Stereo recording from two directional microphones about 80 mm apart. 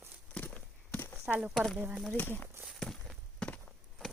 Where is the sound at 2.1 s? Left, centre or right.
Left.